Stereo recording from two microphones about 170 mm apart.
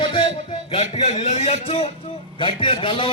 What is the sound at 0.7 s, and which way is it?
A man's voice, 35° left (ahead or behind).